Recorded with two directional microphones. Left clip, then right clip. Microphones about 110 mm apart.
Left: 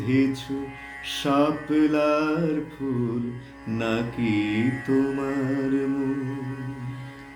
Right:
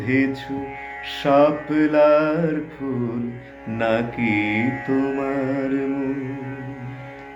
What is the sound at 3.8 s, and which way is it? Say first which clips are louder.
Mantra: right 6 dB; 5° left (ahead or behind).